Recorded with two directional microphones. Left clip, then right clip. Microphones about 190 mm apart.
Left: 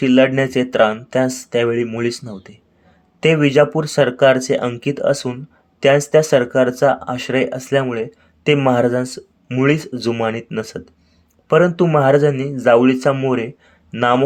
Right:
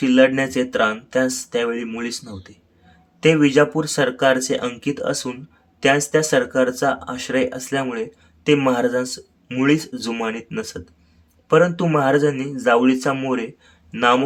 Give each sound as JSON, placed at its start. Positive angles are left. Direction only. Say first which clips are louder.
{"t": 0.0, "sound": "speech", "louder": "left 2 dB", "side_deg": 25}